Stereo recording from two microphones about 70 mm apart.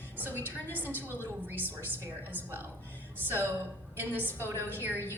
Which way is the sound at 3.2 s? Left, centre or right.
Right.